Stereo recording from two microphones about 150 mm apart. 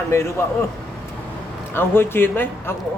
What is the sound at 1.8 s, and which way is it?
Speech, 15° left (ahead or behind).